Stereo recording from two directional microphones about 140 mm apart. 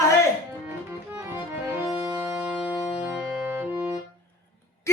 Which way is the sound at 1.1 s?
15° right (ahead or behind).